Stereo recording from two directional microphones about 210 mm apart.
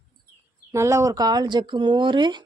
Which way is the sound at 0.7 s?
15° right (ahead or behind).